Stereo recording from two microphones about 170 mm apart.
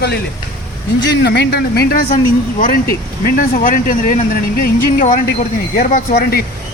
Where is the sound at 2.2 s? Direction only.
55° left (ahead or behind).